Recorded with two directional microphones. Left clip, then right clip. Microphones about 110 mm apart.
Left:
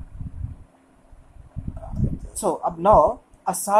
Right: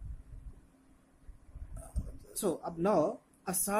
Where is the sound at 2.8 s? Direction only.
20° right (ahead or behind).